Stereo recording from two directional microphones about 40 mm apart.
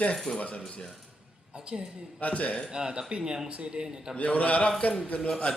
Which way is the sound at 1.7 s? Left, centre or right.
Right.